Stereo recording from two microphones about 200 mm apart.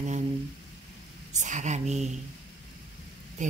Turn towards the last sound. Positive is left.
turn(degrees=-40)  # may be behind; listen again after turning